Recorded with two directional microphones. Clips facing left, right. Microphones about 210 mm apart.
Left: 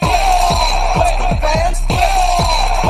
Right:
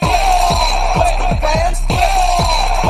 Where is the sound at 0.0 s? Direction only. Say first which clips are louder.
Even; centre (ahead or behind).